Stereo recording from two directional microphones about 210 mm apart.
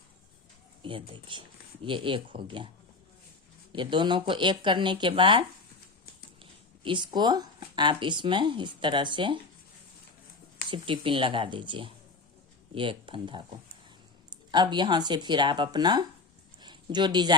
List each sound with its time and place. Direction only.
0.8 s speech: 25° right (ahead or behind)
3.7 s speech: 25° right (ahead or behind)
10.7 s speech: 25° right (ahead or behind)
16.6 s a sound: 20° right (ahead or behind)